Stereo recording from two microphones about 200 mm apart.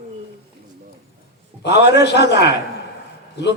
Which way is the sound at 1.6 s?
60° left (ahead or behind).